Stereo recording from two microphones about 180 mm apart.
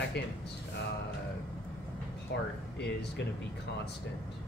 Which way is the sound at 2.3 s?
65° left (ahead or behind).